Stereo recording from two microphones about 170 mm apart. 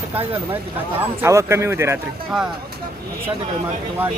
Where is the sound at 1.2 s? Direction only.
15° right (ahead or behind).